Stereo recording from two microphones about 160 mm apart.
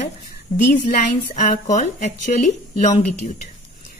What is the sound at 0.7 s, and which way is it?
A woman's voice, 50° left (ahead or behind).